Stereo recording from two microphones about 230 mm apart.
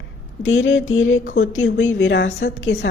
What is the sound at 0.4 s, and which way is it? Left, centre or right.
A woman's voice, left.